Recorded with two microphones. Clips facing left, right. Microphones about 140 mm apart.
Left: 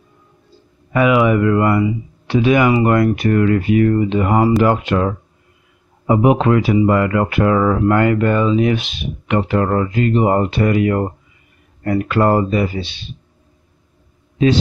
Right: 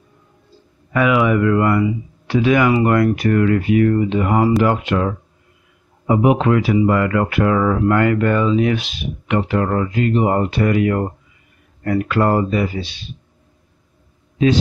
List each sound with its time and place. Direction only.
0.9 s speech: 20° left (ahead or behind)
9.3 s speech: 35° left (ahead or behind)